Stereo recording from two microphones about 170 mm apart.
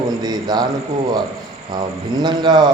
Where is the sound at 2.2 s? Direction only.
25° right (ahead or behind).